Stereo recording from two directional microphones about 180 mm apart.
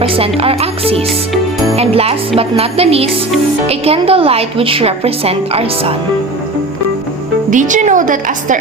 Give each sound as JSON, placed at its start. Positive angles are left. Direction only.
{"t": 0.0, "sound": "a woman's voice", "side_deg": -35}
{"t": 7.5, "sound": "a woman's voice", "side_deg": -45}